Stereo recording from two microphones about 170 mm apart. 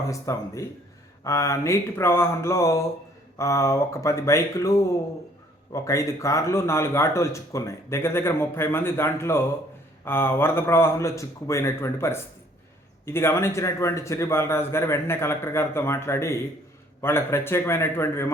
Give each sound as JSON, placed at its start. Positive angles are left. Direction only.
{"t": 0.1, "sound": "a man's voice", "side_deg": 20}